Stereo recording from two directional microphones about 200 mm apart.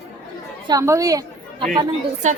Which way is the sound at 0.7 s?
15° right (ahead or behind).